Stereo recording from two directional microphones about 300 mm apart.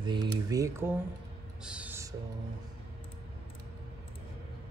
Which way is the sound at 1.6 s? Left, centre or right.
Centre.